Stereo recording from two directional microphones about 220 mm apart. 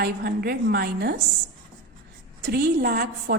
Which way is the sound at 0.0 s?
45° right (ahead or behind).